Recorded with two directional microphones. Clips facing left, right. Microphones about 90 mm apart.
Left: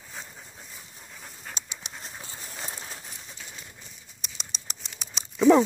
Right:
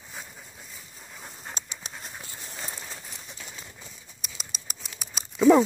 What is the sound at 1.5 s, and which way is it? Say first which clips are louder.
Pant: even; 40° right (ahead or behind).